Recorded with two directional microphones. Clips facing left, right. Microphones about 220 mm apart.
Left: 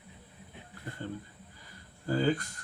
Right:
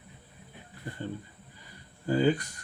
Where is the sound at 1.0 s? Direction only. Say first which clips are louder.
Right 2 dB; 15° right (ahead or behind).